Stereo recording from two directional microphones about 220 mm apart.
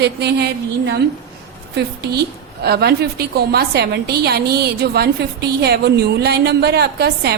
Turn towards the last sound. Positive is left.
turn(degrees=-45)  # may be behind; listen again after turning